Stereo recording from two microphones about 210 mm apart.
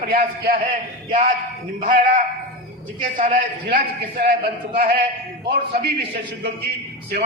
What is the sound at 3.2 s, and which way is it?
A man's voice, 40° right (ahead or behind).